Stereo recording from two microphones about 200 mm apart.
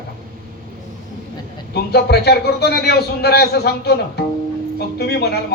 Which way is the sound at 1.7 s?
55° left (ahead or behind).